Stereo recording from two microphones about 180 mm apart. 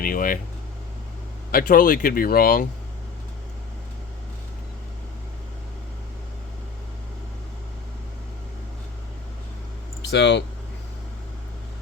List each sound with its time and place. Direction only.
0.0 s speech: 50° left (ahead or behind)
1.5 s speech: 55° left (ahead or behind)
10.0 s speech: 75° left (ahead or behind)